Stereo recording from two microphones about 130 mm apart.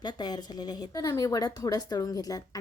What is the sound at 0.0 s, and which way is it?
A woman's voice, 30° left (ahead or behind).